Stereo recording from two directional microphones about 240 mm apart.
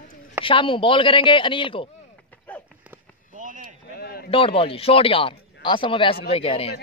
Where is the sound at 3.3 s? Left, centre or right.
Right.